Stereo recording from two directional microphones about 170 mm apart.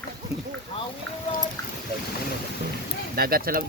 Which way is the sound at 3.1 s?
60° right (ahead or behind).